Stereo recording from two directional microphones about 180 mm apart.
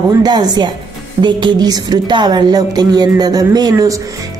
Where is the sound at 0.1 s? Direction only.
20° right (ahead or behind).